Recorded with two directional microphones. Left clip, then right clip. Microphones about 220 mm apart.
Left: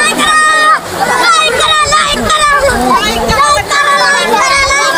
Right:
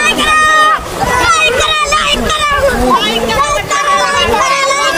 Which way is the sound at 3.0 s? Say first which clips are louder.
Left 2 dB; 5° left (ahead or behind).